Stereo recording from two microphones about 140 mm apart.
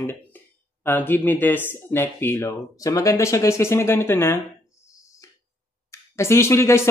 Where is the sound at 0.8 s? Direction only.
15° left (ahead or behind).